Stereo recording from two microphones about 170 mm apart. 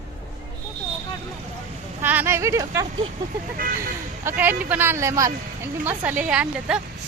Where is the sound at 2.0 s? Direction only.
10° right (ahead or behind).